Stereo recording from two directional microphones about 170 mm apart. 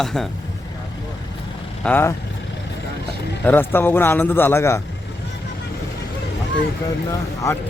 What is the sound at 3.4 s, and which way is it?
A man's voice, 10° left (ahead or behind).